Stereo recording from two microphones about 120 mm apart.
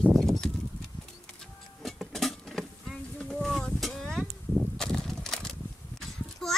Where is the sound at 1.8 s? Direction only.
Centre (ahead or behind).